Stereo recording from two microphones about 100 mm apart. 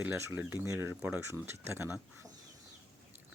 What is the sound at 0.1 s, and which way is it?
Speech, 25° right (ahead or behind).